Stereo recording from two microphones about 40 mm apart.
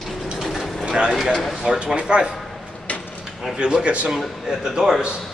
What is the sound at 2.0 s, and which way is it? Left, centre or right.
Speech, right.